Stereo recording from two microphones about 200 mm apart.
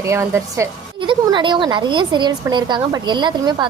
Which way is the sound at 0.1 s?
15° right (ahead or behind).